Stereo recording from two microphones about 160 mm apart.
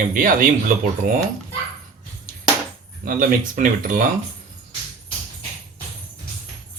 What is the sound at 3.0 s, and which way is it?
Speech, 60° right (ahead or behind).